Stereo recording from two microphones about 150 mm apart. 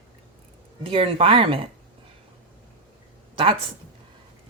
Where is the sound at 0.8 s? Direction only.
40° right (ahead or behind).